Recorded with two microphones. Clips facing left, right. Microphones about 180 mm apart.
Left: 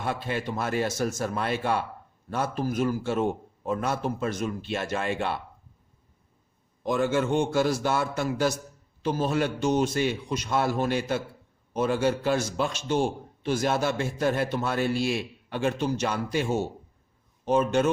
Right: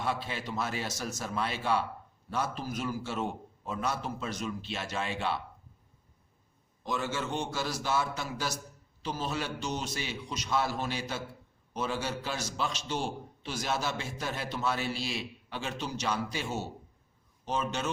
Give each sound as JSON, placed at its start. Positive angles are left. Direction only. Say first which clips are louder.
{"t": 0.0, "sound": "a man's voice", "louder": "left 4 dB", "side_deg": 55}
{"t": 6.8, "sound": "a man's voice", "louder": "left 9 dB", "side_deg": 55}